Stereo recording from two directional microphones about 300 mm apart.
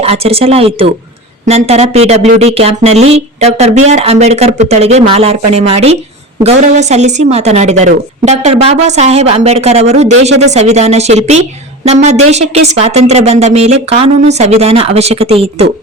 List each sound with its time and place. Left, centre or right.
0.0 s a woman's voice: centre